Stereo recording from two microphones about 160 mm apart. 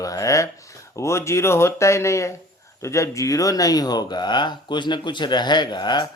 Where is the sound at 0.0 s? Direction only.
20° left (ahead or behind).